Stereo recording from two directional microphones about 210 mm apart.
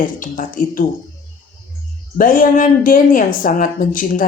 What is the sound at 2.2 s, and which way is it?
A woman's voice, 40° left (ahead or behind).